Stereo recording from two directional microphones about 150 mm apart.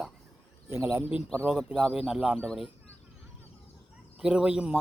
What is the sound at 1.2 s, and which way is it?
Speech, 5° left (ahead or behind).